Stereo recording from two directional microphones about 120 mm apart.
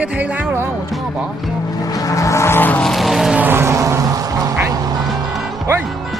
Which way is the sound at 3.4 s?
20° right (ahead or behind).